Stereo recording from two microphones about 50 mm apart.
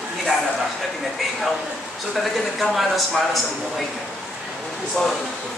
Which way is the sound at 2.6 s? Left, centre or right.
Centre.